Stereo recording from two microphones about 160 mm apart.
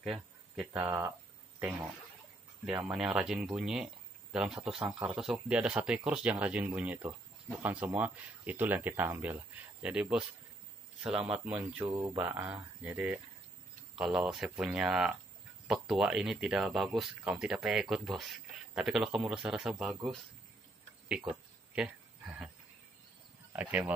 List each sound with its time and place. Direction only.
0.0 s a sound: 5° right (ahead or behind)
0.8 s speech: 15° right (ahead or behind)
1.6 s speech: 5° right (ahead or behind)
11.9 s speech: 25° right (ahead or behind)
12.2 s speech: 10° right (ahead or behind)
21.7 s a sound: 5° right (ahead or behind)
23.5 s speech: 10° right (ahead or behind)